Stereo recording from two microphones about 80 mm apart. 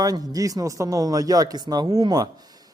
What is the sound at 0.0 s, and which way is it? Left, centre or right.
A man's voice, right.